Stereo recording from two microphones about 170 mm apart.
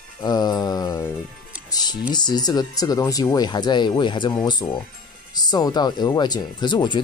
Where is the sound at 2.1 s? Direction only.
25° left (ahead or behind).